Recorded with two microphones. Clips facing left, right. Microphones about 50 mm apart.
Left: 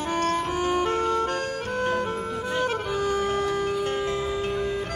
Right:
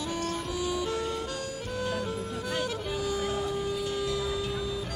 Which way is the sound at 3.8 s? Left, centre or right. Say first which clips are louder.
Left 4 dB; left.